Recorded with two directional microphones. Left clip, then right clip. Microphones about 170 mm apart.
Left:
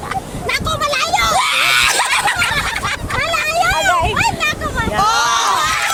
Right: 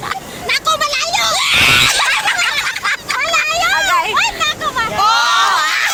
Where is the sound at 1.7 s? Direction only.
80° left.